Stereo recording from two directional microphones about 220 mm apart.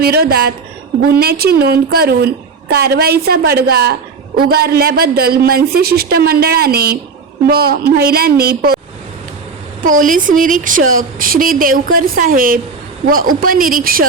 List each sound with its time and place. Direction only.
0.0 s a woman's voice: 45° right (ahead or behind)
9.8 s speech: 35° right (ahead or behind)